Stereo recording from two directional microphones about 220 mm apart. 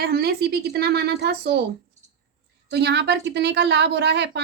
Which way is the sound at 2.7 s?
50° right (ahead or behind).